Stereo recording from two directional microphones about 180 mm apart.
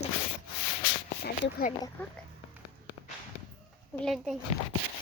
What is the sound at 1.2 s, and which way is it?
Speech, 50° left (ahead or behind).